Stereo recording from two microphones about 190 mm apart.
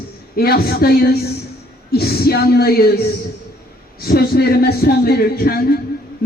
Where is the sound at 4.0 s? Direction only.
55° left (ahead or behind).